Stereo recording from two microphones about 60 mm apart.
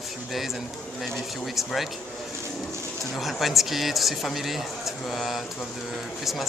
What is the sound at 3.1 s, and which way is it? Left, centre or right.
Speech, centre.